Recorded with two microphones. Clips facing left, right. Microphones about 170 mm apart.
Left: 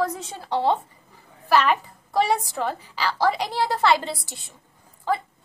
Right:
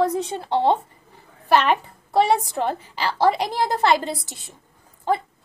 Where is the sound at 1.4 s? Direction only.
25° right (ahead or behind).